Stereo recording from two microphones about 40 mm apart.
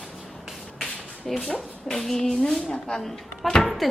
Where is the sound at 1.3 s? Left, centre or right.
Centre.